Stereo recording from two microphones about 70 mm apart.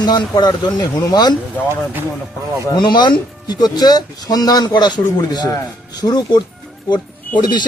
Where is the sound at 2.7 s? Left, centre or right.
Left.